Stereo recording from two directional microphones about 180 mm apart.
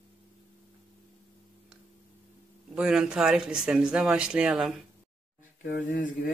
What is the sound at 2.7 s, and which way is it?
Speech, 5° right (ahead or behind).